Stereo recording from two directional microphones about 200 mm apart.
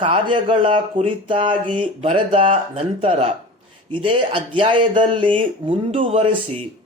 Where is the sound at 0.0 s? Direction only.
25° right (ahead or behind).